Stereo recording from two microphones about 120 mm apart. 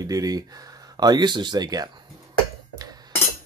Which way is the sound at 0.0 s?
30° right (ahead or behind).